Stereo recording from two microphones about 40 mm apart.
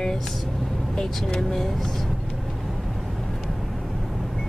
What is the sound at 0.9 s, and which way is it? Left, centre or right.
Speech, centre.